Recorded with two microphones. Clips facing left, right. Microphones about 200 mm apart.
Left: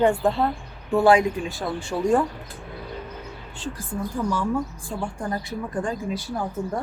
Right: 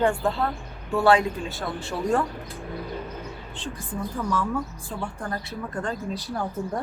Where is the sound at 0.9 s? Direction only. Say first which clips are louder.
Left 3 dB; 15° left (ahead or behind).